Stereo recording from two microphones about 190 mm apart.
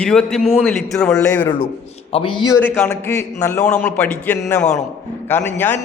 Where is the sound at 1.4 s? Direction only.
25° left (ahead or behind).